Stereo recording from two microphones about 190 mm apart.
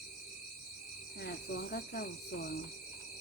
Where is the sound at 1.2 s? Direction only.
60° left (ahead or behind).